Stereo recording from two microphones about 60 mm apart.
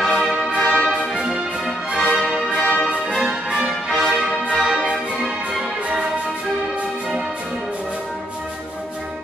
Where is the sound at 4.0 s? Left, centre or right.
Centre.